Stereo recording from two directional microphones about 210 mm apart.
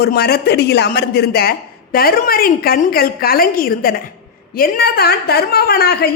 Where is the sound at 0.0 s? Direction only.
45° left (ahead or behind).